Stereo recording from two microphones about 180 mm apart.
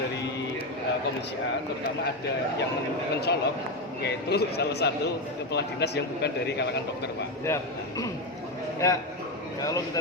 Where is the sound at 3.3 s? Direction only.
70° left (ahead or behind).